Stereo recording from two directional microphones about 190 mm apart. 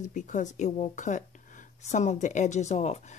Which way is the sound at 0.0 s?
40° left (ahead or behind).